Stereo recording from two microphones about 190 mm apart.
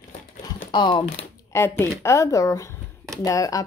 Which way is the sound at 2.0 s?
15° left (ahead or behind).